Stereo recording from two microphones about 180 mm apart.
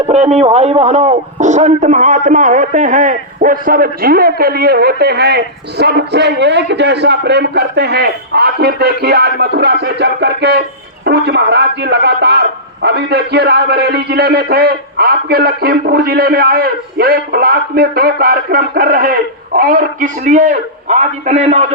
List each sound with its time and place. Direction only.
0.1 s speech: 40° right (ahead or behind)